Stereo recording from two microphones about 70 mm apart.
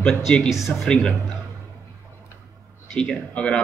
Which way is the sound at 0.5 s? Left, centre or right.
Centre.